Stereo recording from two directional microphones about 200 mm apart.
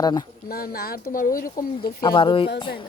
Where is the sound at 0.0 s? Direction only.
20° left (ahead or behind).